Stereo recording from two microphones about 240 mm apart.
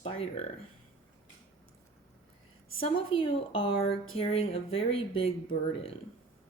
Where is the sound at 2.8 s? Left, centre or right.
Left.